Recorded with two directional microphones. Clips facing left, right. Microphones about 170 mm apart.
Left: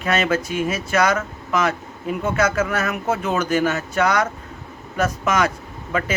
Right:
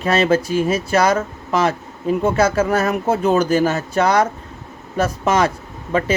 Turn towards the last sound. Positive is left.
turn(degrees=-30)  # may be behind; listen again after turning